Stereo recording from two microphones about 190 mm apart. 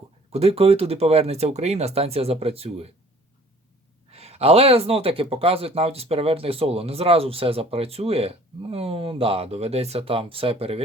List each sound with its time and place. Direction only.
0.3 s speech: 35° right (ahead or behind)
4.1 s speech: 35° right (ahead or behind)